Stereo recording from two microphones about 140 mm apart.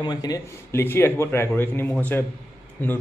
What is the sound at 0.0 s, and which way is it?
Speech, 30° left (ahead or behind).